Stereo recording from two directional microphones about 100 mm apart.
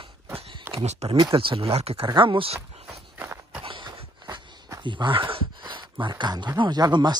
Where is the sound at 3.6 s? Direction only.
60° right (ahead or behind).